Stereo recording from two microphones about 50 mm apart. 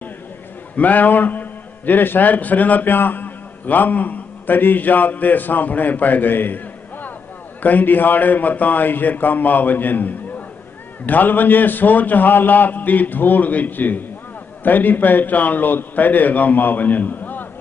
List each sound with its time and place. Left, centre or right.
0.7 s a man's voice: left